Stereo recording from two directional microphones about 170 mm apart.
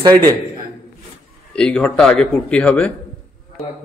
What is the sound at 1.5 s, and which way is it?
Speech, 5° left (ahead or behind).